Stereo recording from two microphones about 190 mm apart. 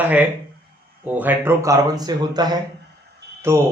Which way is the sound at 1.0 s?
10° right (ahead or behind).